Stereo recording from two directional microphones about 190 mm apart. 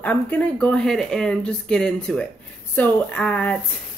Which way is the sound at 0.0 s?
10° left (ahead or behind).